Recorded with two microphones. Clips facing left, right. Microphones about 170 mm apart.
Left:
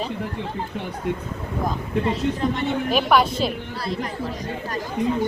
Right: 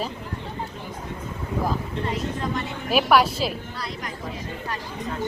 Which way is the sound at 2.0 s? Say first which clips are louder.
Left 5 dB; 25° left (ahead or behind).